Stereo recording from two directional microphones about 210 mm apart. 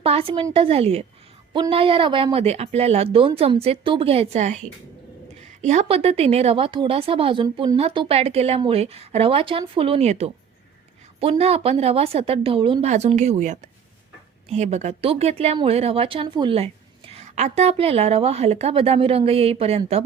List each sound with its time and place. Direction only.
0.0 s speech: 25° right (ahead or behind)
5.6 s speech: 30° right (ahead or behind)